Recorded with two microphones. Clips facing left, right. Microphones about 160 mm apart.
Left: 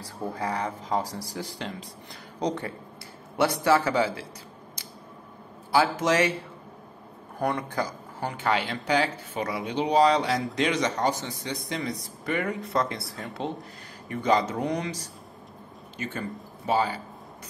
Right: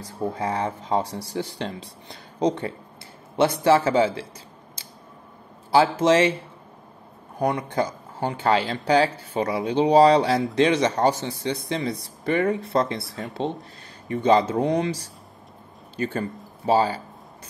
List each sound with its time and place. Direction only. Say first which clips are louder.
0.0 s speech: right 4 dB; 25° right (ahead or behind)
5.7 s speech: right 5 dB; 30° right (ahead or behind)
7.3 s speech: right 4 dB; 20° right (ahead or behind)